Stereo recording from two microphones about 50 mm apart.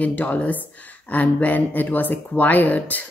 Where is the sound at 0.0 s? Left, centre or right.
Left.